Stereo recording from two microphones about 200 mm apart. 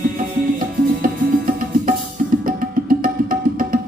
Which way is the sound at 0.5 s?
45° right (ahead or behind).